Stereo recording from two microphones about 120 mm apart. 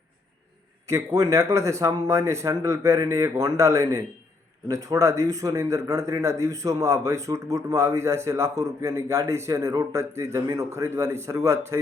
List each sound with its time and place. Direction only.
0.9 s speech: 25° right (ahead or behind)